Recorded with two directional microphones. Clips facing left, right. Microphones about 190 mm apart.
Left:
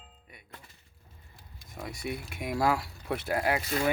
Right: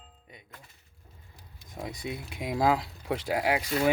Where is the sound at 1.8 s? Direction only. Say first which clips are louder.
Even; 20° right (ahead or behind).